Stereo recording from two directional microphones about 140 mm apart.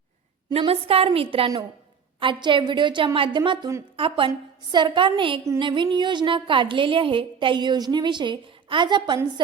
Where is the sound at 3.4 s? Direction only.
25° right (ahead or behind).